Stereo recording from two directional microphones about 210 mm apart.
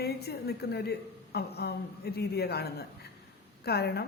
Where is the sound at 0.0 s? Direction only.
50° left (ahead or behind).